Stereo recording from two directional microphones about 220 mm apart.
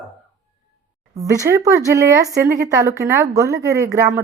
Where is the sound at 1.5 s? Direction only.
15° right (ahead or behind).